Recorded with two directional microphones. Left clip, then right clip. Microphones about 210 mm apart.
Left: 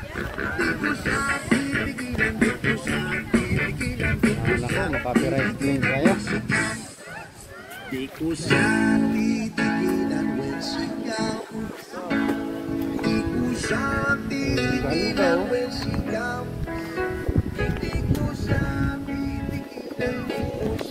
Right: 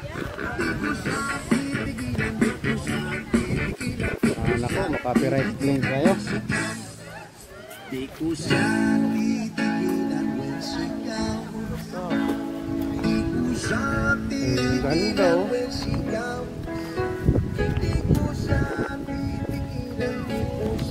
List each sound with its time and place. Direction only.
0.4 s music: 40° right (ahead or behind); by 4.8 s 55° right (ahead or behind)
4.8 s music: 45° right (ahead or behind)
8.5 s music: 45° right (ahead or behind)
13.0 s music: 50° right (ahead or behind)
18.1 s music: 40° right (ahead or behind)
20.0 s music: 50° right (ahead or behind)